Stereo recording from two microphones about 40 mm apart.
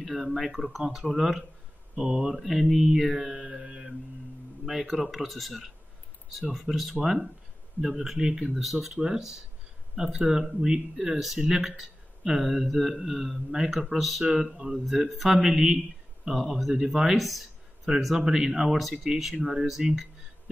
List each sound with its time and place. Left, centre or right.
0.0 s speech: centre
2.3 s speech: centre
7.0 s speech: centre
8.2 s speech: centre
14.2 s speech: centre
14.9 s speech: centre
15.3 s speech: centre
18.1 s speech: centre
18.7 s speech: centre